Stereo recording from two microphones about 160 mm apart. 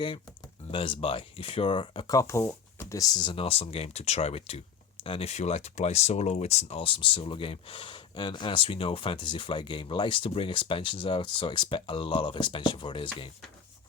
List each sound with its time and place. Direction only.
0.7 s speech: 35° left (ahead or behind)